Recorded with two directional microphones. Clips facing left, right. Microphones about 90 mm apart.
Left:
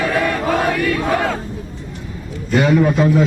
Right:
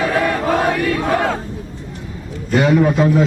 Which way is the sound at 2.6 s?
20° right (ahead or behind).